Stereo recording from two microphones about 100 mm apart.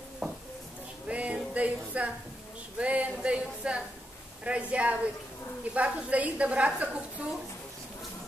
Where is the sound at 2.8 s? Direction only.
10° right (ahead or behind).